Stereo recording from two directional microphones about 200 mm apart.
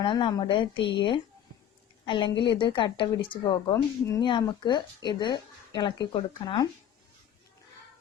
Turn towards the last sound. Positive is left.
turn(degrees=25)  # may be behind; listen again after turning